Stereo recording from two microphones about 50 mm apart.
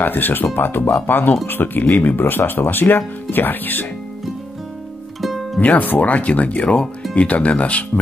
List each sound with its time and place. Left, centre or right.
0.0 s speech: left
5.6 s speech: left